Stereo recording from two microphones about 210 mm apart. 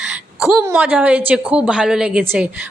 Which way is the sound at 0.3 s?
5° right (ahead or behind).